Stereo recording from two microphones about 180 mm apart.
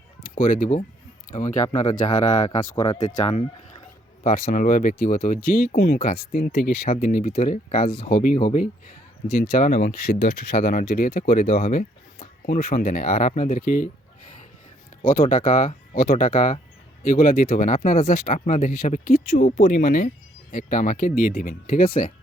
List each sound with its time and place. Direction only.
0.2 s speech: 50° left (ahead or behind)
4.2 s speech: 50° left (ahead or behind)
7.7 s speech: 35° left (ahead or behind)
9.3 s speech: 55° left (ahead or behind)
10.2 s speech: 45° left (ahead or behind)
15.0 s speech: 50° left (ahead or behind)
18.3 s speech: 45° left (ahead or behind)